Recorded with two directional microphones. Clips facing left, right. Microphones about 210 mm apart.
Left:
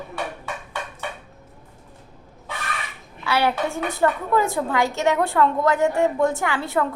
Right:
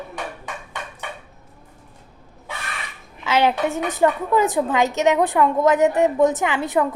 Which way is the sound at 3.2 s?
20° right (ahead or behind).